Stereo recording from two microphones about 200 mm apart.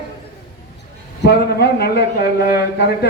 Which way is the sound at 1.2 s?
55° left (ahead or behind).